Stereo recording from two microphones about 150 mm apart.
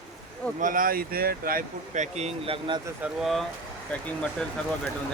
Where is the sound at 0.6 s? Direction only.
65° right (ahead or behind).